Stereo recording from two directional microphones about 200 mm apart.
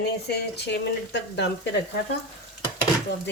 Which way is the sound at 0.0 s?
55° left (ahead or behind).